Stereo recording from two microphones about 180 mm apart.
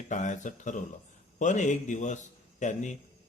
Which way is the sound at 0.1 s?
45° left (ahead or behind).